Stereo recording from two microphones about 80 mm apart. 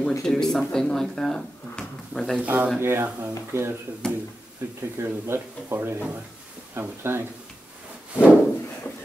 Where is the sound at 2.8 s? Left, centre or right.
Right.